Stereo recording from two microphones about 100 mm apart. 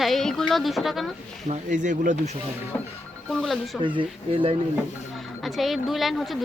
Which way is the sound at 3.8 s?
55° right (ahead or behind).